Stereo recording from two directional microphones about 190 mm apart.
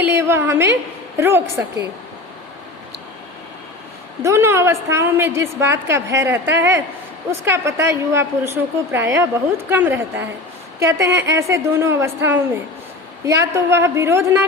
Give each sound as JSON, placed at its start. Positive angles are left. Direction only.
{"t": 0.0, "sound": "a woman's voice", "side_deg": -10}
{"t": 4.2, "sound": "a woman's voice", "side_deg": -15}